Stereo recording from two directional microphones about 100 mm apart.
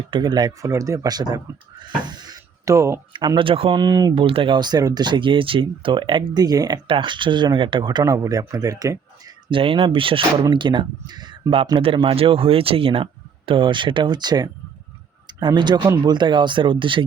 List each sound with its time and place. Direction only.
0.1 s speech: 50° right (ahead or behind)
0.7 s speech: 30° right (ahead or behind)
2.0 s a sound: 45° right (ahead or behind)
3.1 s speech: 50° right (ahead or behind); by 3.8 s 65° right (ahead or behind)
3.8 s speech: 40° right (ahead or behind)
4.1 s speech: 60° right (ahead or behind); by 6.7 s 40° right (ahead or behind)
6.8 s speech: 55° right (ahead or behind); by 9.3 s 35° right (ahead or behind)
9.5 s speech: 60° right (ahead or behind)
11.6 s speech: 60° right (ahead or behind)